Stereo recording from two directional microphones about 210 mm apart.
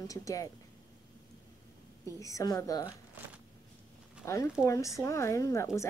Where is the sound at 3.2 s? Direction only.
10° right (ahead or behind).